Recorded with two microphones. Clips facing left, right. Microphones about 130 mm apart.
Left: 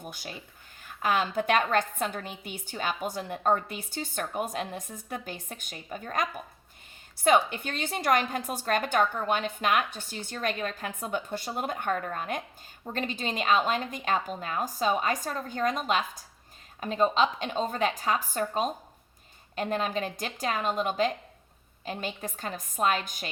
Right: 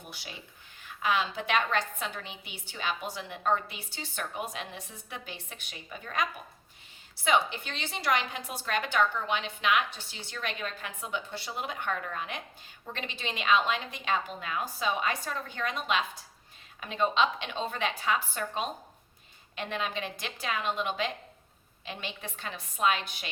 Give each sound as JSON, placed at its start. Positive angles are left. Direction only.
{"t": 0.0, "sound": "a woman's voice", "side_deg": 45}